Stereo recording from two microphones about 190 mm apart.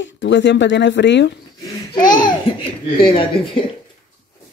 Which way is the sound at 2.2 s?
25° left (ahead or behind).